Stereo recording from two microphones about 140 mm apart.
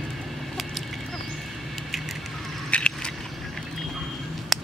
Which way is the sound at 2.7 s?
5° left (ahead or behind).